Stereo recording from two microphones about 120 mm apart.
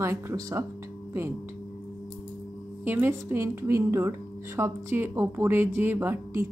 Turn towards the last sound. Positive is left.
turn(degrees=-20)  # may be behind; listen again after turning